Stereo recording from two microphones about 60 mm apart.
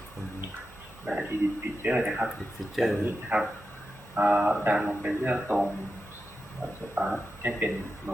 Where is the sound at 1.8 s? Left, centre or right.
Centre.